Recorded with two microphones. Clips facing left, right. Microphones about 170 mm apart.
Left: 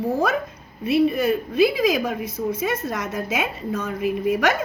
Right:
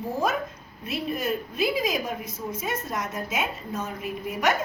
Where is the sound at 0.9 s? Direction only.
70° left (ahead or behind).